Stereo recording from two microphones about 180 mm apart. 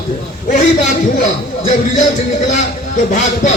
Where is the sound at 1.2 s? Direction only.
40° left (ahead or behind).